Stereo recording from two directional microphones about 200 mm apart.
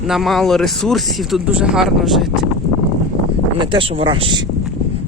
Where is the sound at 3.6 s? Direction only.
25° right (ahead or behind).